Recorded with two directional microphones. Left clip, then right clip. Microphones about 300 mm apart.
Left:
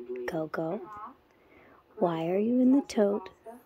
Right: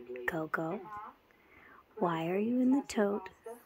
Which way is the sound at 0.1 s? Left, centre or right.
Centre.